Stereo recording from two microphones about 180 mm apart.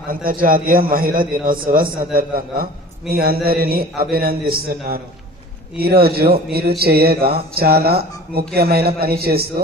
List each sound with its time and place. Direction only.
0.1 s a man's voice: 50° right (ahead or behind)